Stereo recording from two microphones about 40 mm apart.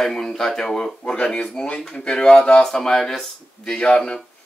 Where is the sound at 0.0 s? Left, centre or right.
Centre; by 2.6 s left.